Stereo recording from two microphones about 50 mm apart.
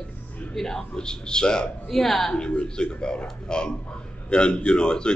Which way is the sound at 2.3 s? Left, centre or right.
Centre.